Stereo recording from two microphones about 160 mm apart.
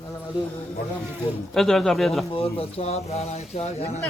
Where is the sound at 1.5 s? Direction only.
Centre (ahead or behind).